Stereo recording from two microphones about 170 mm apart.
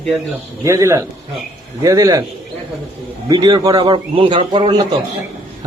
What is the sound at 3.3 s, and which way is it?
A man's voice, 25° right (ahead or behind).